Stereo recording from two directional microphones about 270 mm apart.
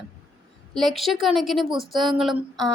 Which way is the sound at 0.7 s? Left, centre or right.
Centre.